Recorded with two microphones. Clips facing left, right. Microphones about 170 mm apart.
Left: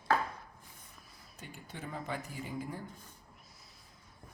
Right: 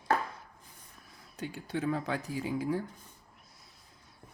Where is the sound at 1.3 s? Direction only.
90° right.